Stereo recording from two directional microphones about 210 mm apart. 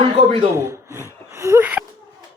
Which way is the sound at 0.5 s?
15° right (ahead or behind).